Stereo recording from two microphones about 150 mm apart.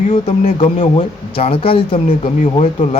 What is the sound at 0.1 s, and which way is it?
Speech, 45° left (ahead or behind).